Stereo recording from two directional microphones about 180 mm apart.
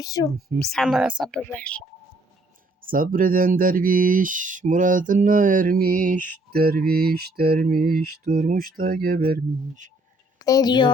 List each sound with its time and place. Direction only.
0.0 s a woman's voice: 20° left (ahead or behind)
0.6 s speech: centre (ahead or behind)
1.3 s speech: 10° left (ahead or behind)
2.8 s speech: 50° right (ahead or behind)
10.4 s a woman's voice: 20° left (ahead or behind)